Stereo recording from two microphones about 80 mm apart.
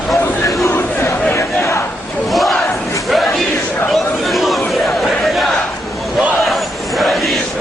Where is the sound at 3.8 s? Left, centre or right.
Centre.